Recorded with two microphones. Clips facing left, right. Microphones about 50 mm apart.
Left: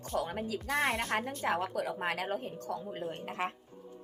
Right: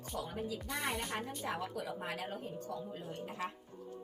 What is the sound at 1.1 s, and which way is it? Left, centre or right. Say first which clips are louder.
Speech: left 7 dB; left.